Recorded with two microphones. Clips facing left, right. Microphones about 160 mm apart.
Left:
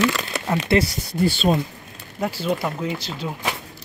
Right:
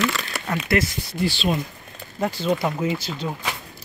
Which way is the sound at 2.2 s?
5° left (ahead or behind).